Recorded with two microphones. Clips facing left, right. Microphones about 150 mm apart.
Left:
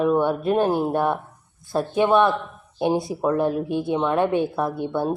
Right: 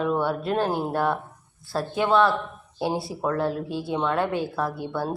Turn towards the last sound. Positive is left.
turn(degrees=20)  # may be behind; listen again after turning